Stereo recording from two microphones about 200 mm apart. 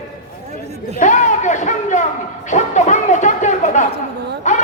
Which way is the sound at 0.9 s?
40° left (ahead or behind).